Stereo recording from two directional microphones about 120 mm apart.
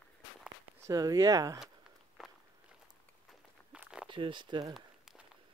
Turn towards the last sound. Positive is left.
turn(degrees=-40)  # may be behind; listen again after turning